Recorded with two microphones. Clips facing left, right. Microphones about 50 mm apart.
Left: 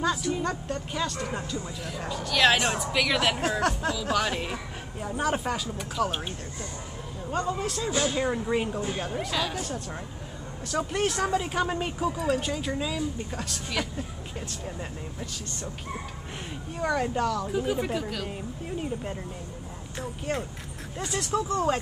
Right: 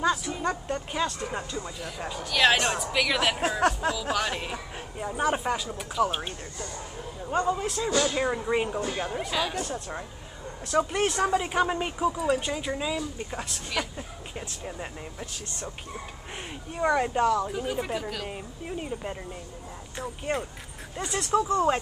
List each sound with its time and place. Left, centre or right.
0.0 s speech: centre
0.7 s speech: centre
7.2 s speech: centre
10.7 s speech: centre
16.7 s speech: centre
17.5 s speech: centre
20.3 s speech: centre